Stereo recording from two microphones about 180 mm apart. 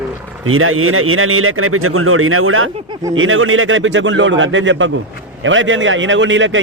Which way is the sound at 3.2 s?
90° right.